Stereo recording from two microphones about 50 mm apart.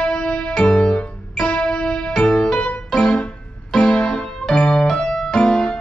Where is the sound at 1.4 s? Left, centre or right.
Centre.